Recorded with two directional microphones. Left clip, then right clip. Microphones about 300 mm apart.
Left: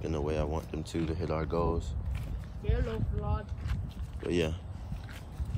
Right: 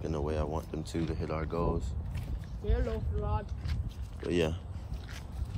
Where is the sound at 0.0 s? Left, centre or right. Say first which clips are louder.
Left 1 dB; centre.